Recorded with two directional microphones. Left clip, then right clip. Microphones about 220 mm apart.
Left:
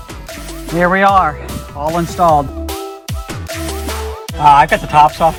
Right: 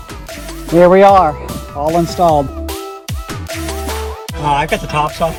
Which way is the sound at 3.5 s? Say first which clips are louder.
Even; centre (ahead or behind).